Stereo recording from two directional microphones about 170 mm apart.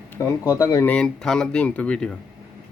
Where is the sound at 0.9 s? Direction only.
5° left (ahead or behind).